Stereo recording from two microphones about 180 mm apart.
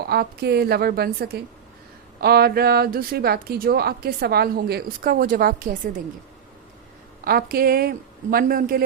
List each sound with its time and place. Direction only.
0.0 s a woman's voice: 60° right (ahead or behind)
7.3 s a woman's voice: 55° right (ahead or behind)